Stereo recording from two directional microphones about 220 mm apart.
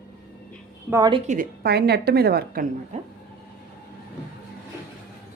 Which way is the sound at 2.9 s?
30° right (ahead or behind).